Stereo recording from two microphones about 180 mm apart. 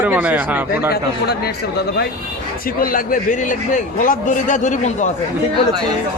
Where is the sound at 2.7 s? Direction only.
50° left (ahead or behind).